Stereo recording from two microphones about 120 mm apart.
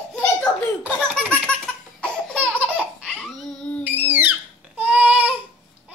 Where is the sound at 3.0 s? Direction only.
5° left (ahead or behind).